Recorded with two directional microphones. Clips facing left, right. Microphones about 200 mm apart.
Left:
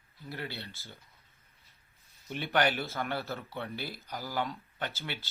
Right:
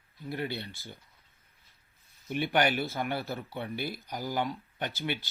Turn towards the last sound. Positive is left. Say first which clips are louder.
# right 4 dB
turn(degrees=-15)  # may be behind; listen again after turning